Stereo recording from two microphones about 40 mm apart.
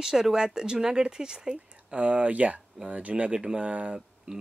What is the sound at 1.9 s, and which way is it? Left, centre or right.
Speech, right.